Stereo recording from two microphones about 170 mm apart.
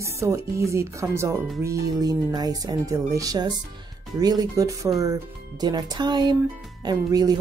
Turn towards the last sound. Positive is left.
turn(degrees=-25)  # may be behind; listen again after turning